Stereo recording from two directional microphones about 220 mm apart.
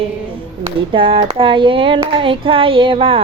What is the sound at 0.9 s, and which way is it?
Music, 25° right (ahead or behind).